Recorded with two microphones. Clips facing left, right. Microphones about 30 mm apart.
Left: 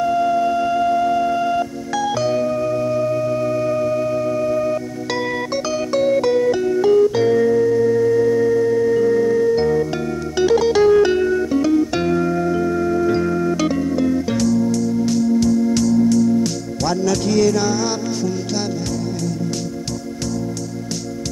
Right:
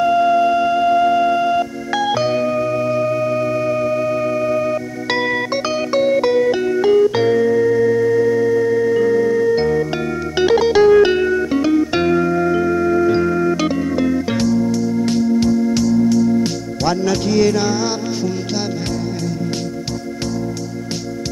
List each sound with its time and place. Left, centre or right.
0.0 s music: right
7.6 s organ: right
10.3 s music: right
15.2 s organ: right